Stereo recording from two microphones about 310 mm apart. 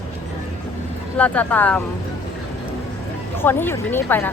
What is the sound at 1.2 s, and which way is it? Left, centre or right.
Speech, centre.